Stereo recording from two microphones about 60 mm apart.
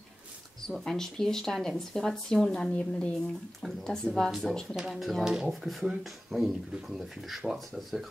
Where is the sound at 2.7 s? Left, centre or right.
Centre.